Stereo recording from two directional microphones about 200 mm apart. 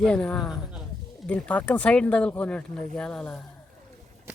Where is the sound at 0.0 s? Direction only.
5° left (ahead or behind).